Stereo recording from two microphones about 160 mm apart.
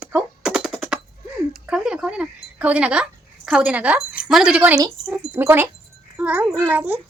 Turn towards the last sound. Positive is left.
turn(degrees=-10)  # may be behind; listen again after turning